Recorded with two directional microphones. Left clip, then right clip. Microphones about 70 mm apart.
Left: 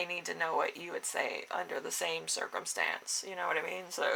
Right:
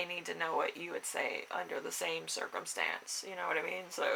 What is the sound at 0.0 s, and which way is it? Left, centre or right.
Speech, left.